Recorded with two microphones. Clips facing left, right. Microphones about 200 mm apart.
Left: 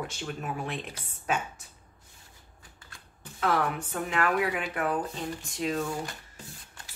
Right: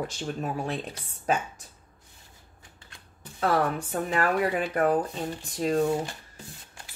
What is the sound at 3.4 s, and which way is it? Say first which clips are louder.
A woman's voice: right 3 dB; 35° right (ahead or behind).